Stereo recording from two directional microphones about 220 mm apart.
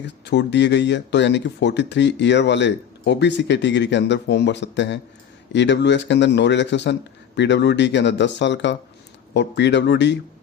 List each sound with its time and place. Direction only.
0.0 s speech: 50° left (ahead or behind)